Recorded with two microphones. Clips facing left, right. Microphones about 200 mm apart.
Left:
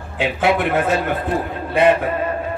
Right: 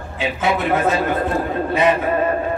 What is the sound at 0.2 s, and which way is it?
Speech, 65° left (ahead or behind).